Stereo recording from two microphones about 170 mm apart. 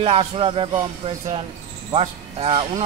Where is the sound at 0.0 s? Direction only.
35° right (ahead or behind).